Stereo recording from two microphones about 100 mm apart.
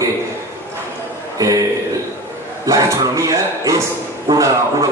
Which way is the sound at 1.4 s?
35° right (ahead or behind).